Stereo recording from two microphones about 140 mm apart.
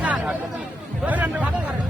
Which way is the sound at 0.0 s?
10° right (ahead or behind).